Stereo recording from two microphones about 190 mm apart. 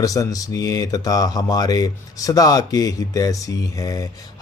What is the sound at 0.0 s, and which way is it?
Speech, 20° left (ahead or behind).